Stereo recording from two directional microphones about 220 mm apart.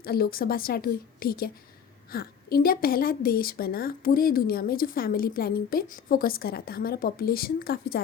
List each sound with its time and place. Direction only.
0.0 s a woman's voice: 40° left (ahead or behind)